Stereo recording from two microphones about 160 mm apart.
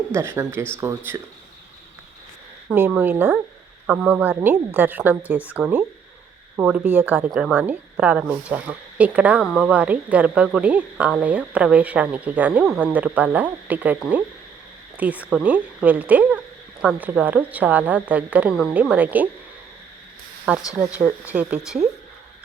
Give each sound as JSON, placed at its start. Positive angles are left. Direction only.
{"t": 0.1, "sound": "speech", "side_deg": -15}
{"t": 2.6, "sound": "speech", "side_deg": -10}
{"t": 20.5, "sound": "speech", "side_deg": -10}